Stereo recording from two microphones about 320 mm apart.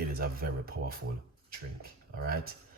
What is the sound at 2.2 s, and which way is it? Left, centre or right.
Speech, right.